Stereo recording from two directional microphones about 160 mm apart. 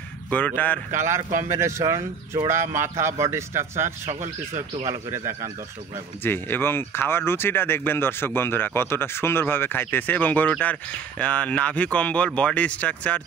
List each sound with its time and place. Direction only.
0.3 s speech: 10° left (ahead or behind)
0.9 s speech: 15° right (ahead or behind)
4.0 s speech: 45° right (ahead or behind)
4.8 s speech: 20° right (ahead or behind)
6.2 s speech: 15° left (ahead or behind)